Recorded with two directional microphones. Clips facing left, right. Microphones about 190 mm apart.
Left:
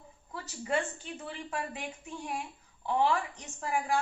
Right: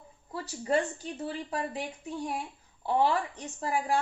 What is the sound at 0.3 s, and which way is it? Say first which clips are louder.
A woman's voice: right 4 dB; 35° right (ahead or behind).